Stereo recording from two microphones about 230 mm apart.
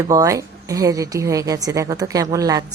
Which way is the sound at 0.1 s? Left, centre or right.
Centre.